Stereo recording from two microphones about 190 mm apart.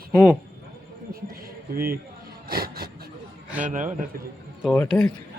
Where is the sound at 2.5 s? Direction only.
55° right (ahead or behind).